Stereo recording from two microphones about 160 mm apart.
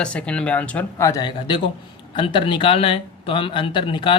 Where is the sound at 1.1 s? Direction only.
25° left (ahead or behind).